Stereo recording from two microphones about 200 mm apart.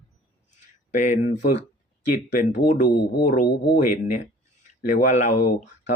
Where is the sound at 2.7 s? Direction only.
40° left (ahead or behind).